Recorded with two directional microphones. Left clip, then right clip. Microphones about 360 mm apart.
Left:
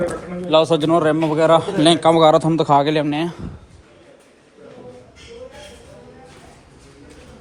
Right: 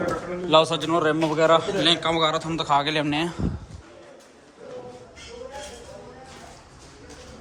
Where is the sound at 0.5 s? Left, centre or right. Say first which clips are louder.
Left 4 dB; centre.